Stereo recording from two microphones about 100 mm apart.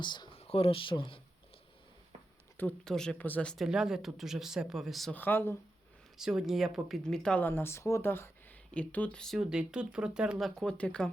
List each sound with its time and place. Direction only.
0.0 s speech: 50° left (ahead or behind)
0.3 s speech: 85° left; by 1.2 s 55° left (ahead or behind)
2.8 s speech: 5° left (ahead or behind)
3.5 s speech: 5° right (ahead or behind)
5.1 s speech: 20° left (ahead or behind)
6.1 s speech: 5° right (ahead or behind)
7.4 s speech: 20° left (ahead or behind)
8.7 s speech: 15° left (ahead or behind)